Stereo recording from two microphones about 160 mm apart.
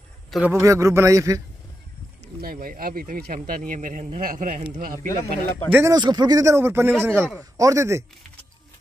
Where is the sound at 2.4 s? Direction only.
65° right (ahead or behind).